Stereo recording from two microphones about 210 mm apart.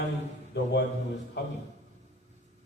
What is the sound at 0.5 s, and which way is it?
Speech, 55° left (ahead or behind).